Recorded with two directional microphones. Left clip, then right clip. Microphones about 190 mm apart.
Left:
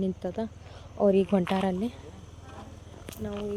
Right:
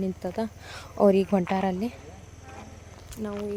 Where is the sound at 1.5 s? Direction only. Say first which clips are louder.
Right 2 dB; centre (ahead or behind).